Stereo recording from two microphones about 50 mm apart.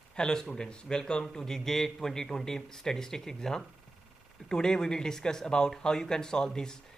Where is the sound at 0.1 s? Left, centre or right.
Centre.